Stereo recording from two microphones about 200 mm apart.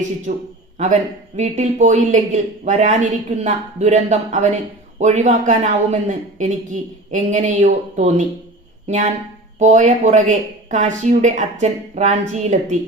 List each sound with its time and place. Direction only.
0.3 s speech: 35° right (ahead or behind)